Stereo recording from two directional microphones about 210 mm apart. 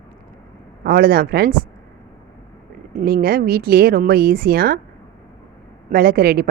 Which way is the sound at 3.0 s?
45° right (ahead or behind).